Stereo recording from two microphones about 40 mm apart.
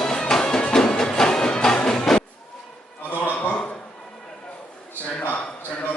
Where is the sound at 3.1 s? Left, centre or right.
Left.